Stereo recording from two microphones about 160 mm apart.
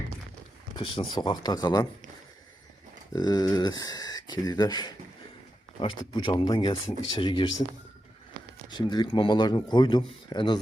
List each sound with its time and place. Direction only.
0.8 s speech: 30° left (ahead or behind)
3.1 s speech: 25° left (ahead or behind)
8.7 s speech: 30° left (ahead or behind)